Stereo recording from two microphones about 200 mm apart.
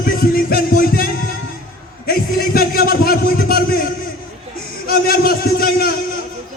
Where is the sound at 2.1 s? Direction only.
50° left (ahead or behind).